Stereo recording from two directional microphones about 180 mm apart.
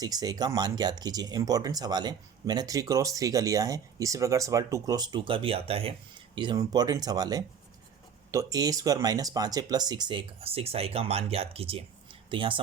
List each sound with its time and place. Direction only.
0.0 s speech: 20° right (ahead or behind)